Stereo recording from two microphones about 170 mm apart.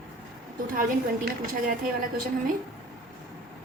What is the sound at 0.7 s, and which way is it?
A woman's voice, 55° right (ahead or behind).